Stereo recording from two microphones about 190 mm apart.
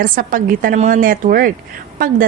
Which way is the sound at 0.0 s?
45° right (ahead or behind).